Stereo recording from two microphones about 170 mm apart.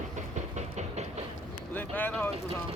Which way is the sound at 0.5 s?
40° right (ahead or behind).